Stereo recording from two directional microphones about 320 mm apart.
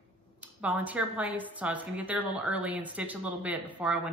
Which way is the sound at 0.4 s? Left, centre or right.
Centre.